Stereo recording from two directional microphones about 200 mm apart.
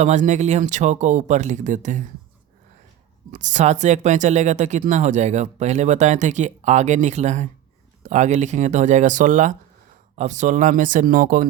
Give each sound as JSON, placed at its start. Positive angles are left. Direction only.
{"t": 0.0, "sound": "speech", "side_deg": -35}
{"t": 3.3, "sound": "speech", "side_deg": -35}